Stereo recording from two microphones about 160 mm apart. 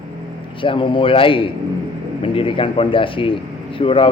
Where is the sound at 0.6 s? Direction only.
30° left (ahead or behind).